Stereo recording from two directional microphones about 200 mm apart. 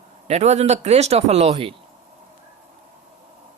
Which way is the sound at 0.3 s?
35° right (ahead or behind).